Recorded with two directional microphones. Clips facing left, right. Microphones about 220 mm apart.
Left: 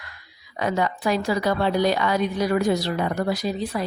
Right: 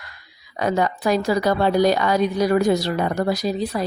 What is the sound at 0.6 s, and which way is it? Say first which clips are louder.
A woman's voice: right 3 dB; 40° right (ahead or behind).